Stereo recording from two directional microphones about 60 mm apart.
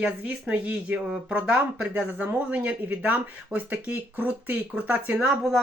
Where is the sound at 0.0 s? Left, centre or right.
Right.